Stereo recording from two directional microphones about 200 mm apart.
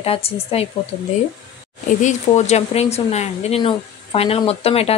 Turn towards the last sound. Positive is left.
turn(degrees=30)  # may be behind; listen again after turning